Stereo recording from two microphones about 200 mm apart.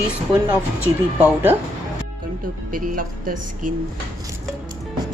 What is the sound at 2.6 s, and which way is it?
Speech, 45° right (ahead or behind).